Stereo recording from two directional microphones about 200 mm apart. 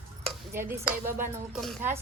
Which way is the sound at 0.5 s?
10° right (ahead or behind).